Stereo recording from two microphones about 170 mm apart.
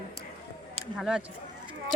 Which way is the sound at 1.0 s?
5° right (ahead or behind).